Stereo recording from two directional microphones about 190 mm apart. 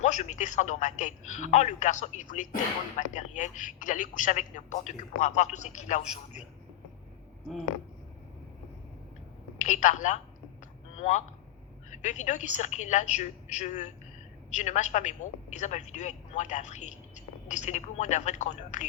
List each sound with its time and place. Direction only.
0.0 s a woman's voice: 40° left (ahead or behind)
9.6 s a woman's voice: 40° left (ahead or behind)
10.6 s a sound: 40° left (ahead or behind)
11.9 s a woman's voice: 40° left (ahead or behind)